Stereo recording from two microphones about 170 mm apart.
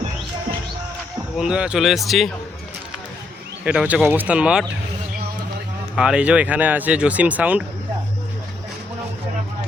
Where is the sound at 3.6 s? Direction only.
5° right (ahead or behind).